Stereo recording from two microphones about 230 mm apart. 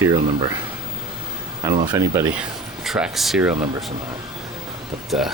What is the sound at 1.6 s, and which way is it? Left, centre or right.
Speech, centre.